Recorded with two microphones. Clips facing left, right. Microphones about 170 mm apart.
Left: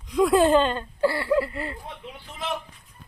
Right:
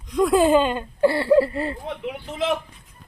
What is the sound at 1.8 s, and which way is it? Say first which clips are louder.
Speech: right 10 dB; 90° right.